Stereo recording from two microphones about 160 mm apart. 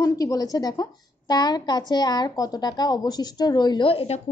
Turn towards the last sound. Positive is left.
turn(degrees=40)  # may be behind; listen again after turning